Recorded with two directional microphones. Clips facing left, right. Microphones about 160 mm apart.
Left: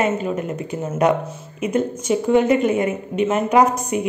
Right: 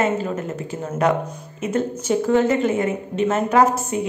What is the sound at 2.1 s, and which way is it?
A woman's voice, 15° left (ahead or behind).